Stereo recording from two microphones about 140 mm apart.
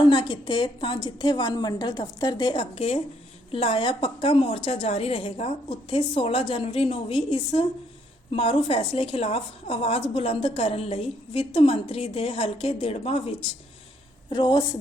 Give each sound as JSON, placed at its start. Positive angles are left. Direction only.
{"t": 0.0, "sound": "a woman's voice", "side_deg": 35}
{"t": 14.3, "sound": "a woman's voice", "side_deg": 30}